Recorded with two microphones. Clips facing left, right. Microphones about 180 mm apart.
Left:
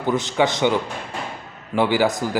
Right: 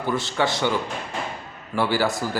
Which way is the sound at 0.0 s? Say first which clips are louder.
Left 4 dB; 20° left (ahead or behind).